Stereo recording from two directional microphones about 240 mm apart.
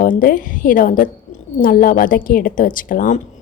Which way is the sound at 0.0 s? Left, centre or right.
Left.